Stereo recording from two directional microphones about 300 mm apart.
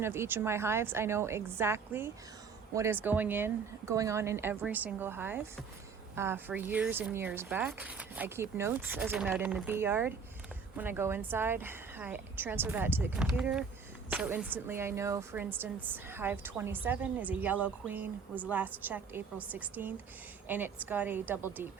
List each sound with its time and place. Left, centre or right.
0.0 s speech: centre